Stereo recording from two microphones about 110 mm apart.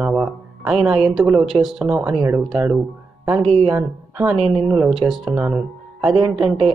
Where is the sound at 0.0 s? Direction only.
10° right (ahead or behind).